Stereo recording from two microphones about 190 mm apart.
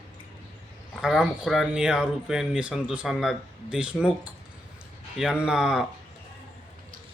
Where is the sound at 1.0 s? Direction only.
5° right (ahead or behind).